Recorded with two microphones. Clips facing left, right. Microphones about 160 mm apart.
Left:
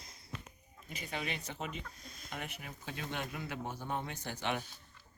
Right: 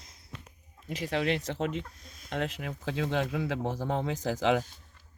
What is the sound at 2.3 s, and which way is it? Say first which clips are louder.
Speech: right 11 dB; 90° right.